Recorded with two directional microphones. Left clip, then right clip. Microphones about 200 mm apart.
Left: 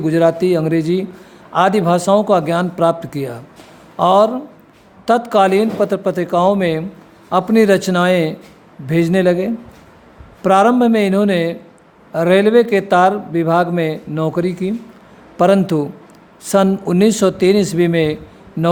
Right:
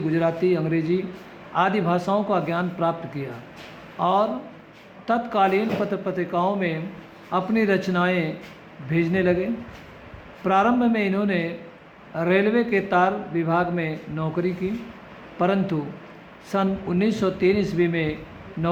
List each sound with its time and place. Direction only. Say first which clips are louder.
0.0 s a man's voice: left 8 dB; 70° left (ahead or behind)